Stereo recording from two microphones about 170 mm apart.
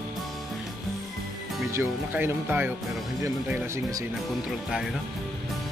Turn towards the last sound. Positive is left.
turn(degrees=-15)  # may be behind; listen again after turning